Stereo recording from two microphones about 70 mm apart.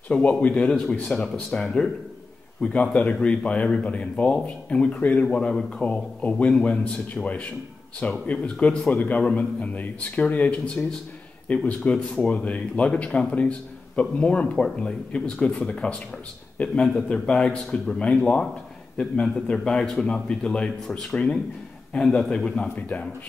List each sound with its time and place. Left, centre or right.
0.4 s a man's voice: centre
18.1 s a man's voice: centre